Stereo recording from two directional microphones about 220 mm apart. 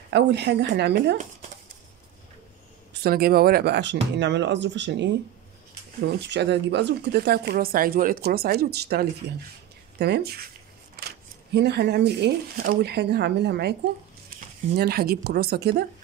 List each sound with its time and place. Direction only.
0.1 s speech: 50° right (ahead or behind)
2.9 s speech: 45° right (ahead or behind)
6.2 s speech: 50° right (ahead or behind)
14.8 s speech: 45° right (ahead or behind)